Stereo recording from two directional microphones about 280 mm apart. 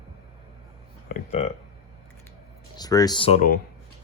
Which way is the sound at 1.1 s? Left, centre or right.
Left.